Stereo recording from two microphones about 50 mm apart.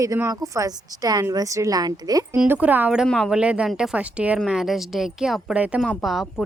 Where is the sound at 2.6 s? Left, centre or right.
Right.